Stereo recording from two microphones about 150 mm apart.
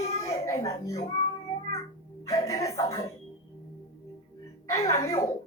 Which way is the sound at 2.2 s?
20° left (ahead or behind).